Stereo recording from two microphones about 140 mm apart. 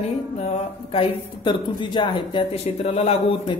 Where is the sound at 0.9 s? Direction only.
35° left (ahead or behind).